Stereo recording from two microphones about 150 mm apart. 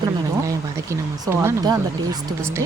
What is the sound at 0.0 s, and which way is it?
Speech, 20° right (ahead or behind).